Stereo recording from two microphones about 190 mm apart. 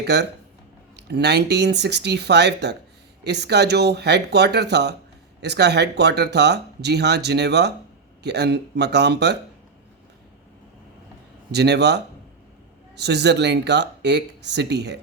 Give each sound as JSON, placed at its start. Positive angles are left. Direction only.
{"t": 0.0, "sound": "speech", "side_deg": -60}
{"t": 11.5, "sound": "speech", "side_deg": -60}